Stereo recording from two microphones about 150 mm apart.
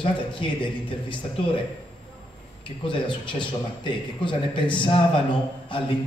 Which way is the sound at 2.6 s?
35° left (ahead or behind).